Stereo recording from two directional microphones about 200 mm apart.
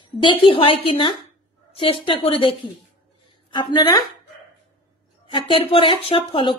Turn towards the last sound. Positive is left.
turn(degrees=25)  # may be behind; listen again after turning